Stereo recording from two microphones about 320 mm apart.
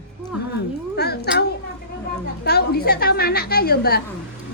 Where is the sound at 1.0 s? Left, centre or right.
Left.